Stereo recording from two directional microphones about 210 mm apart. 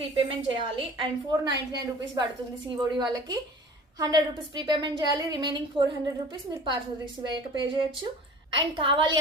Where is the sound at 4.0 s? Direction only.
20° right (ahead or behind).